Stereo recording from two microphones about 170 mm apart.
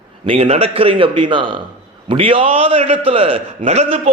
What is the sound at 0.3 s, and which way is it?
A man's voice, 35° right (ahead or behind).